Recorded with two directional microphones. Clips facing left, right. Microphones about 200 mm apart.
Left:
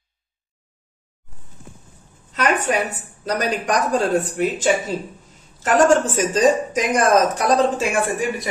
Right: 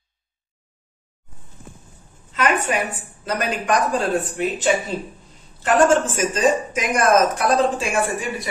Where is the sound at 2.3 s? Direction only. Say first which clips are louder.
Left 1 dB; 40° left (ahead or behind).